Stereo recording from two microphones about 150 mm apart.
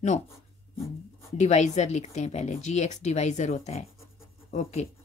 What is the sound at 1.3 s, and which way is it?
Speech, 50° left (ahead or behind).